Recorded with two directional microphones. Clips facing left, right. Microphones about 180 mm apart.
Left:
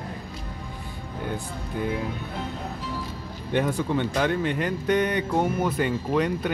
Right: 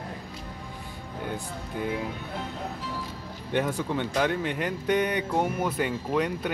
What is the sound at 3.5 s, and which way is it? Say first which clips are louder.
Speech: left 3 dB; 5° right (ahead or behind).